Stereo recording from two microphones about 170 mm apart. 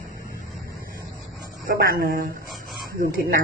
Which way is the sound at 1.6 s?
65° right (ahead or behind).